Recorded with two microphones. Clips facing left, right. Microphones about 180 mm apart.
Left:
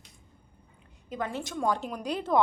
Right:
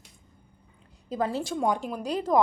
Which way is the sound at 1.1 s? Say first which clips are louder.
Right 5 dB; 35° right (ahead or behind).